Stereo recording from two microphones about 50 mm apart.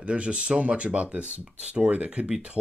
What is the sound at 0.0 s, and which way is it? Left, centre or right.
Speech, right.